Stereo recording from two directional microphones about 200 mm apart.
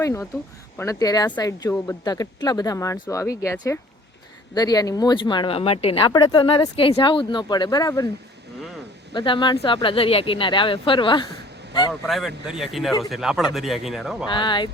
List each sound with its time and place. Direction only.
0.0 s speech: 15° left (ahead or behind)
9.1 s speech: 25° left (ahead or behind)
11.9 s speech: centre (ahead or behind)
14.3 s speech: 25° left (ahead or behind)